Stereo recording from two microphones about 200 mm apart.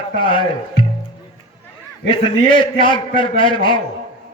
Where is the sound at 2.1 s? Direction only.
25° left (ahead or behind).